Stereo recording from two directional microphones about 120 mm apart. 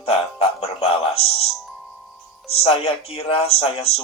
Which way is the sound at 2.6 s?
55° left (ahead or behind).